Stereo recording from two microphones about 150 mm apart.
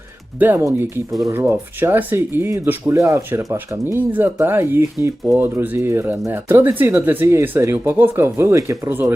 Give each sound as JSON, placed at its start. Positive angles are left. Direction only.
{"t": 0.3, "sound": "speech", "side_deg": -15}